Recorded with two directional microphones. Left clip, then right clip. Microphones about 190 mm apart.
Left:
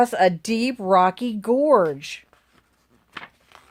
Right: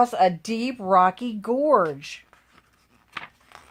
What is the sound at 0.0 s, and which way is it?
Speech, 40° left (ahead or behind).